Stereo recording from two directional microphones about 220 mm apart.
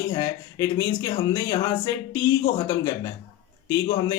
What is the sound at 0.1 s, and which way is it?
A man's voice, 15° left (ahead or behind).